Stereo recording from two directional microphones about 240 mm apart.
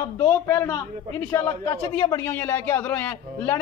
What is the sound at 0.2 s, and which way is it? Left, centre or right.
A man's voice, centre.